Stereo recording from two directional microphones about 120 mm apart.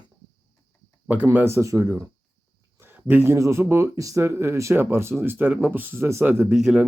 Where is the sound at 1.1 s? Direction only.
15° right (ahead or behind).